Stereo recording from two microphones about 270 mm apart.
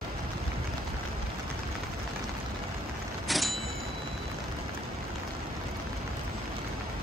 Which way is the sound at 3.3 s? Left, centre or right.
Centre.